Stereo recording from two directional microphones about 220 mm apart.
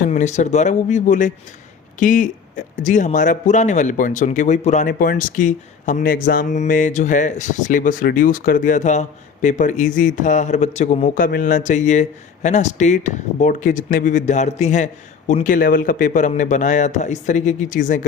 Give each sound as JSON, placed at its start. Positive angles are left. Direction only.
{"t": 0.1, "sound": "speech", "side_deg": 35}